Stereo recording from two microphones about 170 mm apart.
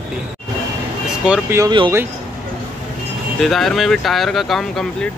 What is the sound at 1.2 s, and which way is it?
Speech, 5° right (ahead or behind).